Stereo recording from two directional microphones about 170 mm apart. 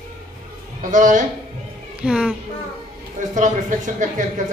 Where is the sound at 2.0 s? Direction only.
5° right (ahead or behind).